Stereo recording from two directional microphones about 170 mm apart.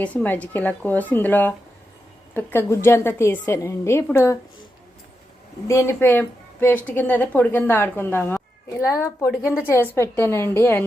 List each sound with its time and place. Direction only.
0.0 s a woman's voice: 10° left (ahead or behind)
5.6 s a woman's voice: 15° left (ahead or behind)
9.2 s a woman's voice: 5° right (ahead or behind)
9.8 s a woman's voice: 15° left (ahead or behind)